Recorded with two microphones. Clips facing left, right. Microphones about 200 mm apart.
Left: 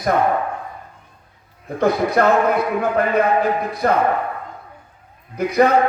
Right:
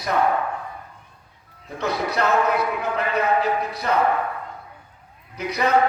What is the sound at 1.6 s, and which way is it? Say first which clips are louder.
A man's voice: left 7 dB; 50° left (ahead or behind).